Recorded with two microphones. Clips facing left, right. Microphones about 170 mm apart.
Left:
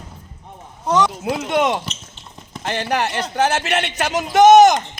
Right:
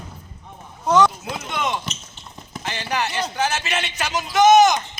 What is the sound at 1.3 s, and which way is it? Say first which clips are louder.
Speech: left 7 dB; 70° left (ahead or behind).